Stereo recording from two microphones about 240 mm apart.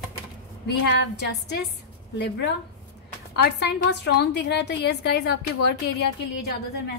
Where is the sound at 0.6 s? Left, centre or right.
Left.